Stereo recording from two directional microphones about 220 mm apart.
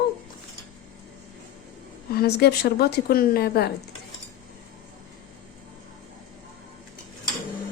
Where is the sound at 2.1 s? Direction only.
45° left (ahead or behind).